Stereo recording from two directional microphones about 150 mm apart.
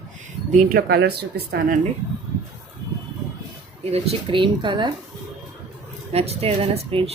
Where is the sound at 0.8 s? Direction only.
85° right.